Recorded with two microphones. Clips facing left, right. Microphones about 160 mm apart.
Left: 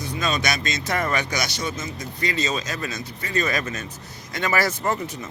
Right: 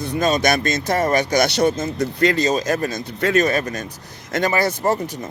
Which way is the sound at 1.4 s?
60° right (ahead or behind).